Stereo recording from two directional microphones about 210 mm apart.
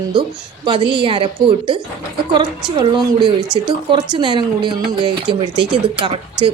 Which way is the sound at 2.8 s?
25° right (ahead or behind).